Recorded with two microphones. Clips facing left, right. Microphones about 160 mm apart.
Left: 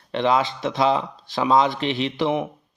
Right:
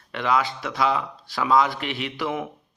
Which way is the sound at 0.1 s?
25° left (ahead or behind).